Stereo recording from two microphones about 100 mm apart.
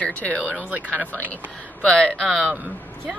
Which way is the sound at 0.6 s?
15° right (ahead or behind).